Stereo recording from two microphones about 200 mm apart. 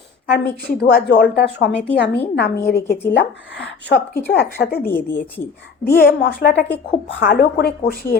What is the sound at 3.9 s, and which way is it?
Speech, 55° left (ahead or behind).